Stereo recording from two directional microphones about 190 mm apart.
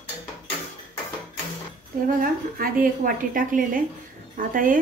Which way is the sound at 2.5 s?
50° right (ahead or behind).